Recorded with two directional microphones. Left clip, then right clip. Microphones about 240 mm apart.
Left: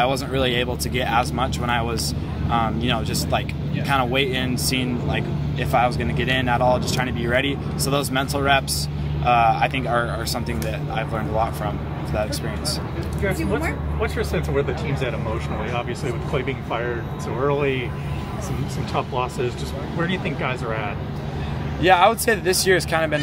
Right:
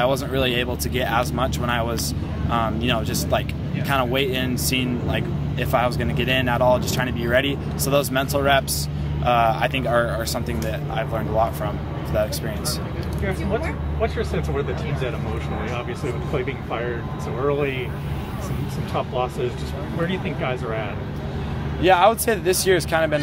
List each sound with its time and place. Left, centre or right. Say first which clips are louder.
0.0 s speech: even; centre
14.0 s speech: even; left
16.3 s speech: left 2 dB; left
20.0 s speech: left 1 dB; left
21.8 s speech: even; centre